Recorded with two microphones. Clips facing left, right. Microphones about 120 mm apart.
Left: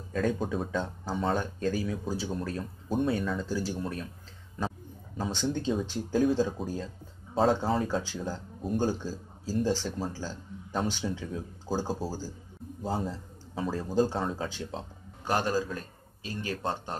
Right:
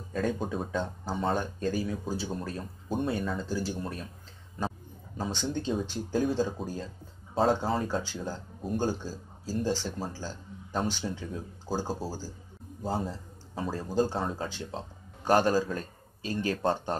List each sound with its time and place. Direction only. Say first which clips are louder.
0.1 s speech: left 1 dB; centre (ahead or behind)
4.6 s a sound: even; centre (ahead or behind)
5.7 s speech: left 1 dB; centre (ahead or behind)
15.2 s a man's voice: right 4 dB; 35° right (ahead or behind)